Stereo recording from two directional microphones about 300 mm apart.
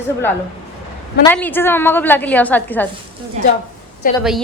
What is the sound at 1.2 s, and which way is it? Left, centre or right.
A woman's voice, centre.